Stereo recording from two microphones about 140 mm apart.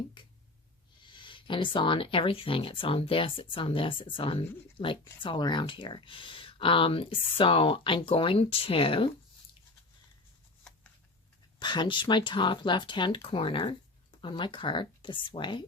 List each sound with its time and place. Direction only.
0.2 s a sound: 35° left (ahead or behind)
1.0 s speech: 35° left (ahead or behind)
11.6 s speech: 35° left (ahead or behind)